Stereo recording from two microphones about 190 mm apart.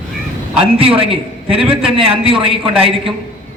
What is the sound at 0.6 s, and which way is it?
A man's voice, 30° right (ahead or behind).